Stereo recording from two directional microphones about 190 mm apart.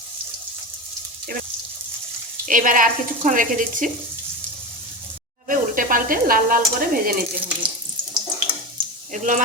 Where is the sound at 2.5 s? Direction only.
45° right (ahead or behind).